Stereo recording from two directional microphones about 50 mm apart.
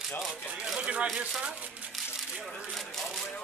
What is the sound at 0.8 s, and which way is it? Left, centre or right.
Speech, right.